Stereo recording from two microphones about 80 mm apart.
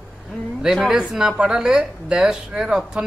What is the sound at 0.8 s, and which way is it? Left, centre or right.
A man's voice, centre.